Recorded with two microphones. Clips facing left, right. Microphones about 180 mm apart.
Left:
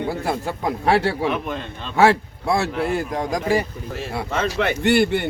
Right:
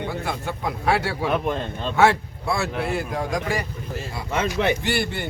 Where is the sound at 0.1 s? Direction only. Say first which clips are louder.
Left 4 dB; 40° left (ahead or behind).